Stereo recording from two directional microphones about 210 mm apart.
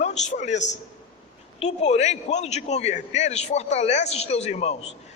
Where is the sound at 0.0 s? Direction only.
35° left (ahead or behind).